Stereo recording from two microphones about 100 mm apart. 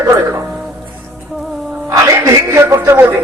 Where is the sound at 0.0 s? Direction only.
30° right (ahead or behind).